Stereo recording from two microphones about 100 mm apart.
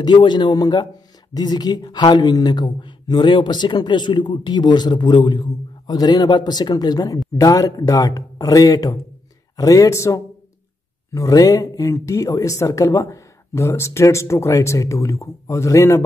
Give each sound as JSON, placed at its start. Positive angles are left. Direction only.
{"t": 0.0, "sound": "speech", "side_deg": 50}